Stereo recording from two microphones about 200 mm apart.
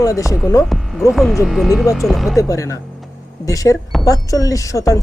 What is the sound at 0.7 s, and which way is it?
Hum, centre (ahead or behind).